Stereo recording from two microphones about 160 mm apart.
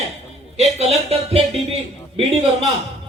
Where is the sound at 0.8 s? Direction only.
40° right (ahead or behind).